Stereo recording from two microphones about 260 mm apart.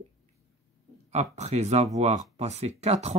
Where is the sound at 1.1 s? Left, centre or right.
Right.